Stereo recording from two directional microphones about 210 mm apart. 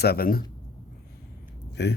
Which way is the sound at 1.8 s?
55° left (ahead or behind).